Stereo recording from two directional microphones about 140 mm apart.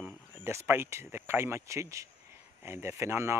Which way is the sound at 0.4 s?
20° right (ahead or behind).